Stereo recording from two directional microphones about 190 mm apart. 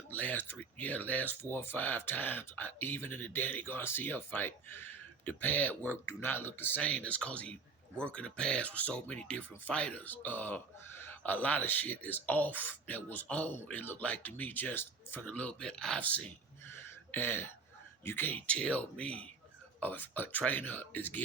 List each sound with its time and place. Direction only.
0.1 s speech: 10° left (ahead or behind)